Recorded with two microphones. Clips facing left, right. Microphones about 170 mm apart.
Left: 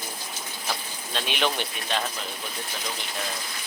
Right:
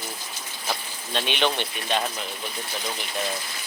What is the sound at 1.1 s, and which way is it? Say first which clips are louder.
Speech: right 2 dB; centre (ahead or behind).